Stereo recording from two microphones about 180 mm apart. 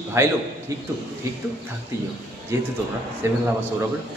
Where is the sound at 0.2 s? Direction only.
15° right (ahead or behind).